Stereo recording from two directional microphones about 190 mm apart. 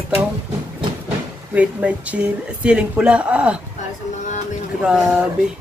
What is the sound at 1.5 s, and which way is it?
Speech, 5° right (ahead or behind).